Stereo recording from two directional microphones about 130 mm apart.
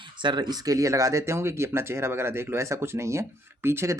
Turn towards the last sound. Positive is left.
turn(degrees=-20)  # may be behind; listen again after turning